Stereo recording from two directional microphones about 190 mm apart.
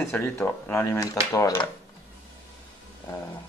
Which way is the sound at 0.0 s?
10° left (ahead or behind).